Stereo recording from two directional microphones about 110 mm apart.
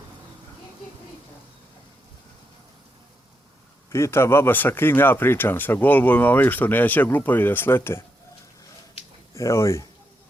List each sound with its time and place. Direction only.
3.8 s speech: 25° left (ahead or behind)
9.3 s speech: 25° left (ahead or behind)